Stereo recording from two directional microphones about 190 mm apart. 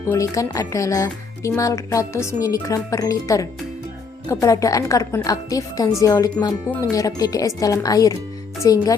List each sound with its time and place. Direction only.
0.1 s speech: 15° left (ahead or behind)